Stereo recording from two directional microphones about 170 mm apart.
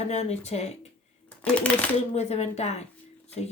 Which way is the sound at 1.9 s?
40° left (ahead or behind).